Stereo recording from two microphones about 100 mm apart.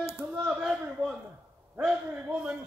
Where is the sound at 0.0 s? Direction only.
15° right (ahead or behind).